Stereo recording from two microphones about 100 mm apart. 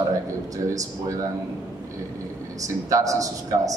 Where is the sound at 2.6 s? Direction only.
35° right (ahead or behind).